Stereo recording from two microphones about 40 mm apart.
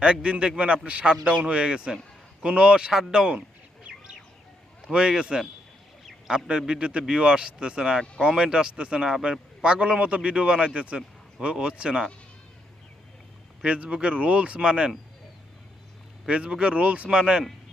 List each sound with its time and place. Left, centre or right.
0.0 s a man's voice: right
4.9 s a man's voice: centre
13.7 s speech: right
14.6 s a man's voice: right
16.2 s a man's voice: right
17.1 s a man's voice: right